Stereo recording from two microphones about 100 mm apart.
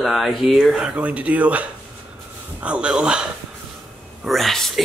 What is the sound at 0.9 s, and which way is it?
Speech, 15° right (ahead or behind).